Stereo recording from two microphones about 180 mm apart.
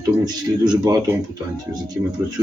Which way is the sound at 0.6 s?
20° right (ahead or behind).